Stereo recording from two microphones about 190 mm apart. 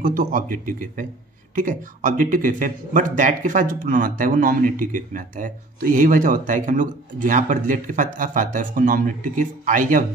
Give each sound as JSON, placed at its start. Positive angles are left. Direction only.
{"t": 0.0, "sound": "a man's voice", "side_deg": -45}